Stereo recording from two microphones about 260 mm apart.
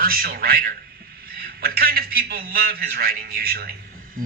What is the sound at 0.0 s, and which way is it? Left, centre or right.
A man's voice, right.